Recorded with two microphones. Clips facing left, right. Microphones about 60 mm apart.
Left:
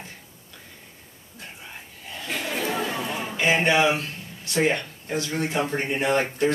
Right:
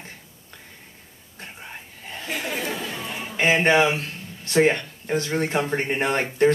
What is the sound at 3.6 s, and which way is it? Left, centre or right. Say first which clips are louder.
Speech: right 2 dB; right.